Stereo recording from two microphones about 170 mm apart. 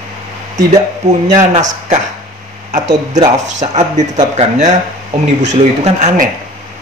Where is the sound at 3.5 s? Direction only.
45° right (ahead or behind).